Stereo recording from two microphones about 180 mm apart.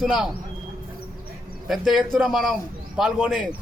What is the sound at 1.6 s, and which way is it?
Speech, centre (ahead or behind).